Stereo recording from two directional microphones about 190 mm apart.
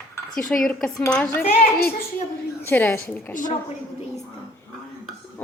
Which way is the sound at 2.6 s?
10° left (ahead or behind).